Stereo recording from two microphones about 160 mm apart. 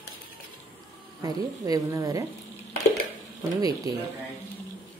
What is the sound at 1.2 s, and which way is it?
A woman's voice, 20° right (ahead or behind).